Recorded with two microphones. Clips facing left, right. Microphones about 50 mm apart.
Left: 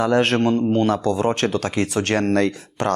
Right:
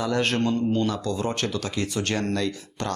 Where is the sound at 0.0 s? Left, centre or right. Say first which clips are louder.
Left 6 dB; left.